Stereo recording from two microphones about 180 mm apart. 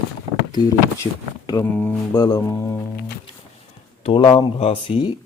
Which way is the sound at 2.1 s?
20° left (ahead or behind).